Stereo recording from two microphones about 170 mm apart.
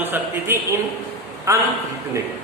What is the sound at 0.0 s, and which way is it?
A man's voice, 15° right (ahead or behind).